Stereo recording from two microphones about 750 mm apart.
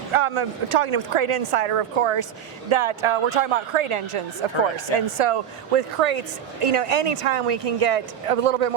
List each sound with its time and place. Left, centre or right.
0.1 s a woman's voice: right